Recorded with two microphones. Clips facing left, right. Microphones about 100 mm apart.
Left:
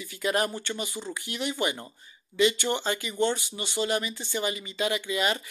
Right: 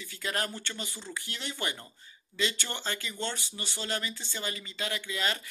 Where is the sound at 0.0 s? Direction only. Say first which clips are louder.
Left 7 dB; 15° left (ahead or behind).